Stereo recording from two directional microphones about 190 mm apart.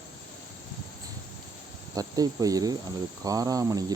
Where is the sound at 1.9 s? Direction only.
20° right (ahead or behind).